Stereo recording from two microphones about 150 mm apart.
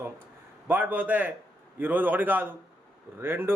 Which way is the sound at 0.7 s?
10° right (ahead or behind).